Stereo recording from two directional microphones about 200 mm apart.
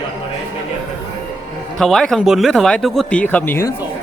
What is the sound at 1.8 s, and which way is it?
Speech, centre (ahead or behind).